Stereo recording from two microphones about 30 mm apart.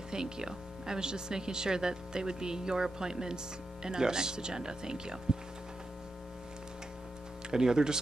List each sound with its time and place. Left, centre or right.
0.1 s speech: right
7.5 s speech: right